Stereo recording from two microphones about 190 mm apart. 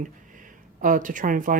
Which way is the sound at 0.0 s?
45° right (ahead or behind).